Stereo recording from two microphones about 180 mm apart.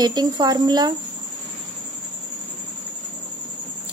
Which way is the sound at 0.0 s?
20° right (ahead or behind).